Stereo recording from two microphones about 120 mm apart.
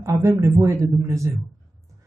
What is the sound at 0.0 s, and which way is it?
Speech, 25° right (ahead or behind).